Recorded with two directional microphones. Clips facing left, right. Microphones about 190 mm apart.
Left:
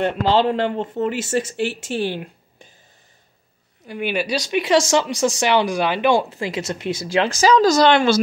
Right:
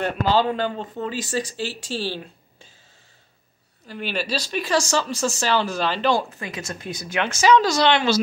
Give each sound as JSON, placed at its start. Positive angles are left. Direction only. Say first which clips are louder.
{"t": 0.0, "sound": "speech", "louder": "left 3 dB", "side_deg": 25}
{"t": 3.8, "sound": "speech", "louder": "left 5 dB", "side_deg": 15}
{"t": 6.3, "sound": "speech", "louder": "left 7 dB", "side_deg": 25}